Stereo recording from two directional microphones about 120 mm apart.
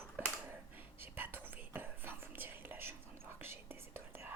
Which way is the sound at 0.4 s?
15° right (ahead or behind).